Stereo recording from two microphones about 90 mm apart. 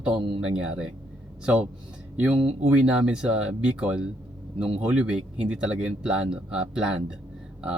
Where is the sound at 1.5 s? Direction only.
15° right (ahead or behind).